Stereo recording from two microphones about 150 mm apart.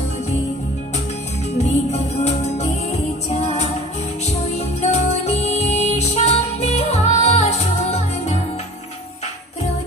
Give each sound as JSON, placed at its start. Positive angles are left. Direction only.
{"t": 1.6, "sound": "music", "side_deg": 50}